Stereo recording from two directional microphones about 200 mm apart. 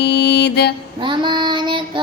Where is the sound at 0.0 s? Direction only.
55° left (ahead or behind).